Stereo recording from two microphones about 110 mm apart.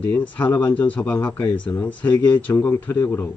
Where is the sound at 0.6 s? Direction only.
15° left (ahead or behind).